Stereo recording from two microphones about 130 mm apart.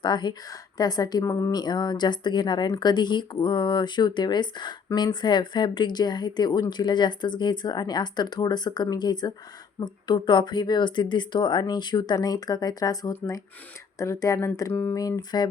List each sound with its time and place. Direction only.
0.0 s speech: 35° left (ahead or behind)